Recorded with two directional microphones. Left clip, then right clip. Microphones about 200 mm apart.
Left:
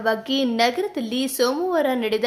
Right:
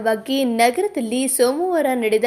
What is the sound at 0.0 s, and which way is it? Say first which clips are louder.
Speech: right 2 dB; 5° right (ahead or behind).